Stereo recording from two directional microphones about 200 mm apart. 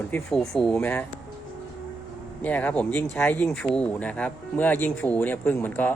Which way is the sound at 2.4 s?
10° left (ahead or behind).